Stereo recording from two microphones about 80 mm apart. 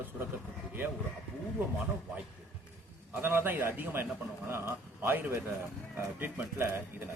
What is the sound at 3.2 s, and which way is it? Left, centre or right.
A man's voice, right.